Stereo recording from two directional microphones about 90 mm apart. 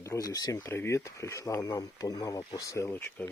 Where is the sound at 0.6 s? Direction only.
30° left (ahead or behind).